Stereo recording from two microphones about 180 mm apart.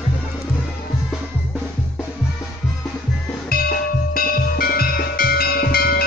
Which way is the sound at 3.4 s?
55° left (ahead or behind).